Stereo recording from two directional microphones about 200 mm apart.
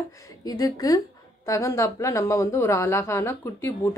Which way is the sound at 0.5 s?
20° left (ahead or behind).